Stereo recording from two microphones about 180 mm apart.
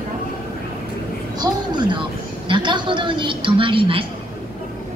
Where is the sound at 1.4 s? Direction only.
25° right (ahead or behind).